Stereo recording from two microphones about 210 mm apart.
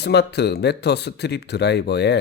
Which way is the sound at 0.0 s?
50° left (ahead or behind).